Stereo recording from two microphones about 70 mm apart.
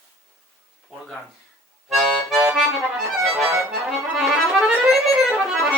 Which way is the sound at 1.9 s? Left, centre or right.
Centre.